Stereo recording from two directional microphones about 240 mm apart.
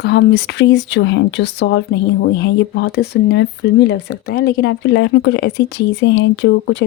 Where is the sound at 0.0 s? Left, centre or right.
Left.